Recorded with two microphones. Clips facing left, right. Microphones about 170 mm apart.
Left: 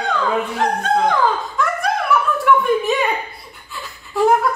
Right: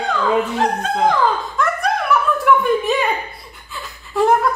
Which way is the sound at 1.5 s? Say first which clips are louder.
Right 1 dB; centre (ahead or behind).